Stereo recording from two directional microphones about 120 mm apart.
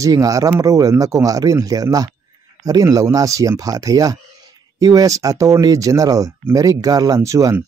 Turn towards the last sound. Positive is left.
turn(degrees=-25)  # may be behind; listen again after turning